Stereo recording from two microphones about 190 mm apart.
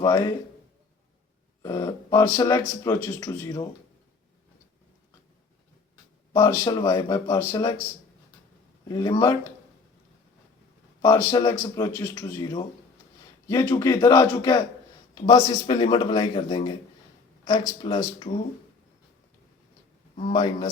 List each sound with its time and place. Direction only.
0.0 s speech: 20° left (ahead or behind)
1.6 s speech: 20° left (ahead or behind)
6.3 s speech: 20° left (ahead or behind)
8.9 s speech: 20° left (ahead or behind)
11.0 s speech: 20° left (ahead or behind)
20.1 s speech: 30° left (ahead or behind)